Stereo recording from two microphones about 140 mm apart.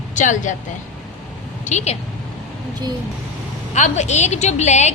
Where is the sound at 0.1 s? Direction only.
65° left (ahead or behind).